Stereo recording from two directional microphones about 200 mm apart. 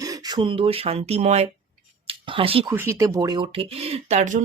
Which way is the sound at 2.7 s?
10° right (ahead or behind).